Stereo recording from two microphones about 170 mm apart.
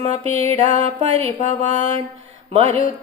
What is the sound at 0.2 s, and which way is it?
Speech, 30° right (ahead or behind).